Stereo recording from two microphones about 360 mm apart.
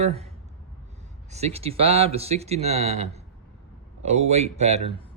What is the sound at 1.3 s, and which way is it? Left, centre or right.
Speech, centre.